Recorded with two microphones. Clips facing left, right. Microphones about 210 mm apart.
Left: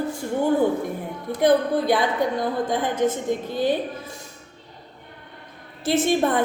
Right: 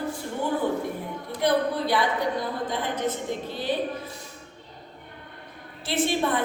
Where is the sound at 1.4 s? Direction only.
50° left (ahead or behind).